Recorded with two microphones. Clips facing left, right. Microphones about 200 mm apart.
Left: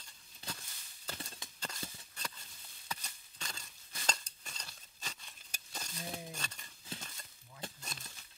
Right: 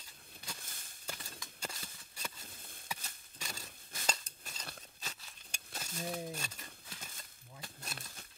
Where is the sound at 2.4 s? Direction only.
50° right (ahead or behind).